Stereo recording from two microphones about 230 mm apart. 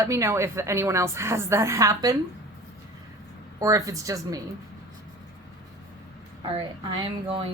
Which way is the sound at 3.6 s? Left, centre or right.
Centre.